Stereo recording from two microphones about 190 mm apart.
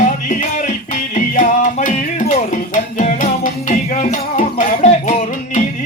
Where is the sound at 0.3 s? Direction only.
40° left (ahead or behind).